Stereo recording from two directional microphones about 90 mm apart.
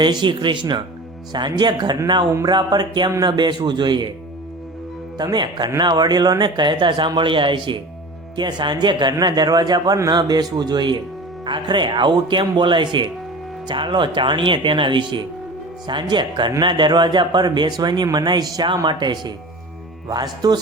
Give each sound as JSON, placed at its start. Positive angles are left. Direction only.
{"t": 0.0, "sound": "a man's voice", "side_deg": -60}
{"t": 5.1, "sound": "a man's voice", "side_deg": -55}